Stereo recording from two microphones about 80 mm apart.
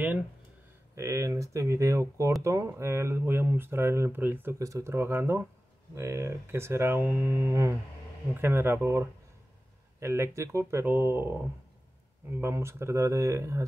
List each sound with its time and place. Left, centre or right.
0.9 s speech: right
4.6 s speech: right
12.3 s speech: right